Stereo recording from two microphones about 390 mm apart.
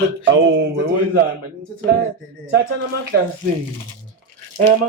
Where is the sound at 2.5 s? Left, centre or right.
Right.